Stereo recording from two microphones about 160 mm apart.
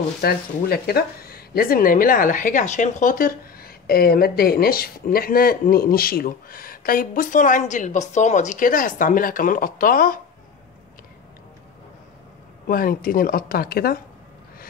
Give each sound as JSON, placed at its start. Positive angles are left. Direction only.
{"t": 0.2, "sound": "speech", "side_deg": 75}
{"t": 12.6, "sound": "speech", "side_deg": 65}